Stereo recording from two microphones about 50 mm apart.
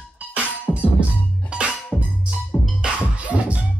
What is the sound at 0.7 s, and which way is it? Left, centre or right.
Music, left.